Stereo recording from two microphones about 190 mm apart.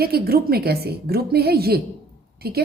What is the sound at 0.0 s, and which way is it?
A woman's voice, 55° right (ahead or behind).